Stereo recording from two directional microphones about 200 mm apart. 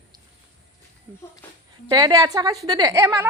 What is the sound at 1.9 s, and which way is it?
A woman's voice, 20° right (ahead or behind).